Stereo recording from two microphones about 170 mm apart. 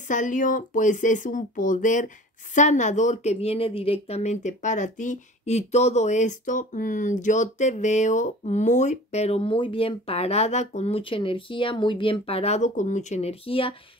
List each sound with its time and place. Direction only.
0.1 s speech: 50° left (ahead or behind); by 13.7 s 30° left (ahead or behind)